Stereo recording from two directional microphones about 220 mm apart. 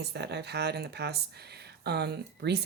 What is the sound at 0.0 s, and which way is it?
Speech, 50° right (ahead or behind).